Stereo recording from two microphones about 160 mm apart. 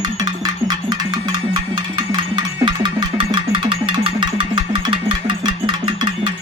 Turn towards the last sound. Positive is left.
turn(degrees=-30)  # may be behind; listen again after turning